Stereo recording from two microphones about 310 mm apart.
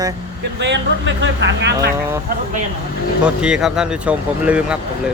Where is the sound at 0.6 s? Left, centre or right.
Right.